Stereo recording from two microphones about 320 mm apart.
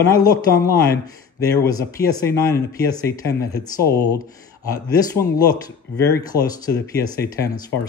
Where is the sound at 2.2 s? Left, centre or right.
Centre.